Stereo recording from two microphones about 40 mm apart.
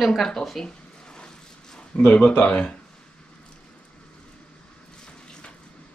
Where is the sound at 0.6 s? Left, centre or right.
Left.